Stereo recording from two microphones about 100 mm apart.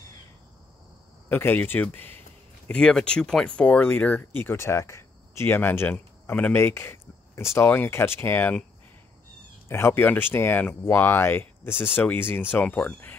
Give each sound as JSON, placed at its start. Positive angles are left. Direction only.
{"t": 1.3, "sound": "speech", "side_deg": 20}
{"t": 2.7, "sound": "speech", "side_deg": 10}
{"t": 9.7, "sound": "speech", "side_deg": 25}